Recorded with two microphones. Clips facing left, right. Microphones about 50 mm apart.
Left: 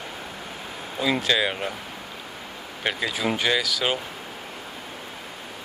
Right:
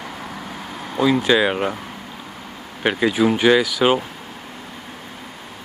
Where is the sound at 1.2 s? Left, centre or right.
Centre.